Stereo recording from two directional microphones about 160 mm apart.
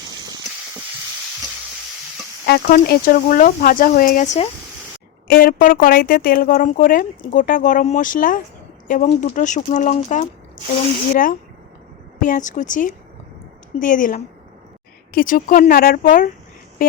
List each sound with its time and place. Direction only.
2.5 s speech: 90° left
2.8 s speech: 70° left (ahead or behind)
9.0 s speech: 45° left (ahead or behind)
11.1 s speech: 60° left (ahead or behind)